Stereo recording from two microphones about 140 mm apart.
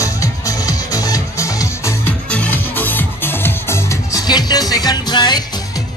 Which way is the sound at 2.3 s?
10° left (ahead or behind).